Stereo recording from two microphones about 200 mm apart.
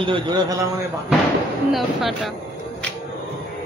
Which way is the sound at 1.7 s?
Centre (ahead or behind).